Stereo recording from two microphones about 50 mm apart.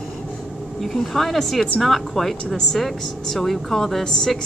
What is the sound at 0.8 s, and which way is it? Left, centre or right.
A woman's voice, centre.